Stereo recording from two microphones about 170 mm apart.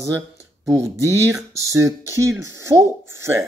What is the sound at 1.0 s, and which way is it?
Speech, 15° right (ahead or behind).